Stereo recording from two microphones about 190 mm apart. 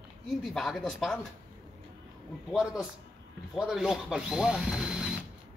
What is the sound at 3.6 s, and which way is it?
Speech, 5° right (ahead or behind).